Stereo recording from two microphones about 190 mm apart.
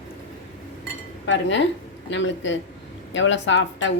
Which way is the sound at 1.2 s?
70° left (ahead or behind).